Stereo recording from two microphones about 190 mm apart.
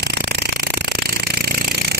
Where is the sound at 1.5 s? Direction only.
55° right (ahead or behind).